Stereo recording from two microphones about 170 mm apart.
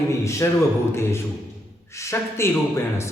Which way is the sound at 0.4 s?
15° left (ahead or behind).